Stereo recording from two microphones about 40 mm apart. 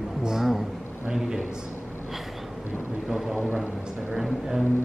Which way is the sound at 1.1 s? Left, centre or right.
Centre.